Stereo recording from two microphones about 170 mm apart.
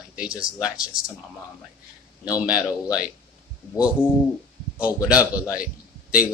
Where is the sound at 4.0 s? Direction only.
10° left (ahead or behind).